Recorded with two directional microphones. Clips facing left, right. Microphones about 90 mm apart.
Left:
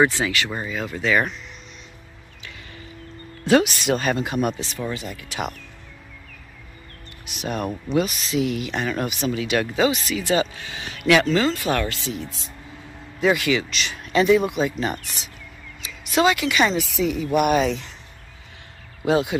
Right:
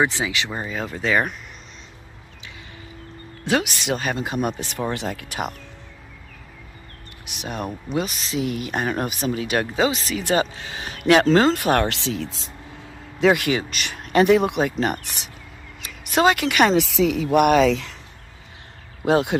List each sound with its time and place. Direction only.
0.0 s speech: 15° right (ahead or behind)
0.7 s speech: 35° right (ahead or behind)
3.4 s speech: 15° right (ahead or behind)
4.2 s speech: 30° right (ahead or behind)
4.6 s speech: 55° right (ahead or behind)
4.9 s speech: 75° right (ahead or behind)
7.4 s speech: 20° right (ahead or behind)
7.9 s speech: 35° right (ahead or behind)
10.2 s speech: 45° right (ahead or behind)
10.5 s speech: 35° right (ahead or behind)
11.5 s speech: 60° right (ahead or behind); by 12.4 s 90° right
13.2 s speech: 60° right (ahead or behind)
15.8 s speech: 55° right (ahead or behind); by 17.9 s 90° right
19.0 s speech: 55° right (ahead or behind)